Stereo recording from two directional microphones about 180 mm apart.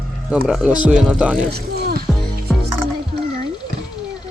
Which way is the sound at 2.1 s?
Centre (ahead or behind).